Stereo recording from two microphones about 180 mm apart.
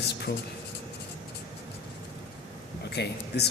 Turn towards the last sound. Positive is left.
turn(degrees=65)  # may be behind; listen again after turning